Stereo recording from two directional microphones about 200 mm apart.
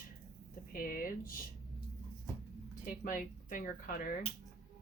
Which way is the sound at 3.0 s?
40° left (ahead or behind).